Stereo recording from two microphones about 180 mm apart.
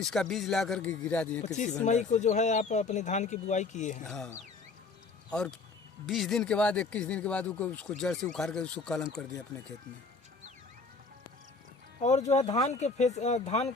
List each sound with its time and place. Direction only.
0.0 s speech: centre (ahead or behind)
1.8 s speech: 40° left (ahead or behind)
4.0 s speech: 5° left (ahead or behind)
5.3 s speech: 5° left (ahead or behind)
12.0 s speech: 40° left (ahead or behind)